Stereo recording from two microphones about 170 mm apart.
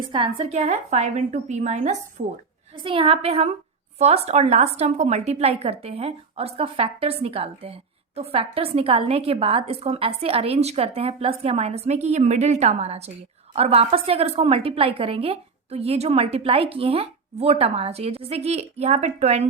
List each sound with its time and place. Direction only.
0.0 s a woman's voice: 30° right (ahead or behind)
2.7 s a woman's voice: 30° right (ahead or behind)